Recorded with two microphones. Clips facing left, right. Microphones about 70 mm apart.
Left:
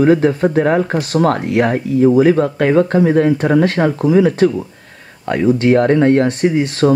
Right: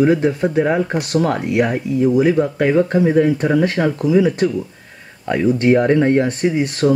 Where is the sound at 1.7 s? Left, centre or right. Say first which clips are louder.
Left 4 dB; left.